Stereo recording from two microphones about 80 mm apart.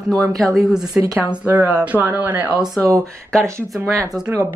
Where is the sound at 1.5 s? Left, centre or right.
Right.